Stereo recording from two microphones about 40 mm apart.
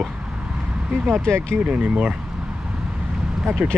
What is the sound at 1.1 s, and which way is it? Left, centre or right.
Speech, left.